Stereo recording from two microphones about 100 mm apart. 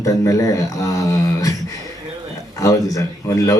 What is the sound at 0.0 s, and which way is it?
Speech, 35° left (ahead or behind).